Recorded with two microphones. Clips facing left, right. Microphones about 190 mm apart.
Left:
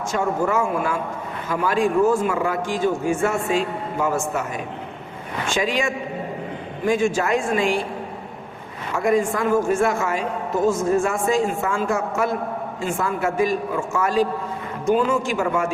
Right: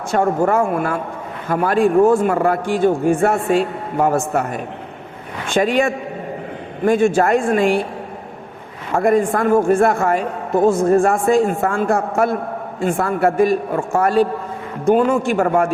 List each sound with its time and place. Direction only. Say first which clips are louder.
0.1 s a man's voice: right 6 dB; 55° right (ahead or behind)
9.0 s a man's voice: right 4 dB; 55° right (ahead or behind)